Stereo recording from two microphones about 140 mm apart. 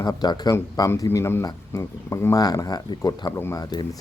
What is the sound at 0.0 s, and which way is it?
Speech, 30° left (ahead or behind).